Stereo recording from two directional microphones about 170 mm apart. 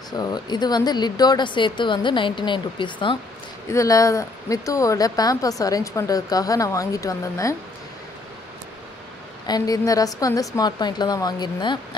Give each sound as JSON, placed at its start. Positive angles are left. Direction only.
{"t": 0.1, "sound": "speech", "side_deg": 25}
{"t": 9.5, "sound": "speech", "side_deg": 20}